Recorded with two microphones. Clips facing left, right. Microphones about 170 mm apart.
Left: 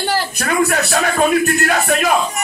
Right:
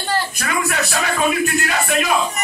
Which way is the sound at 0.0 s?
90° left.